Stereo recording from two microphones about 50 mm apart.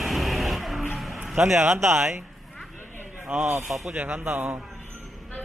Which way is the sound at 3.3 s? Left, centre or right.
Right.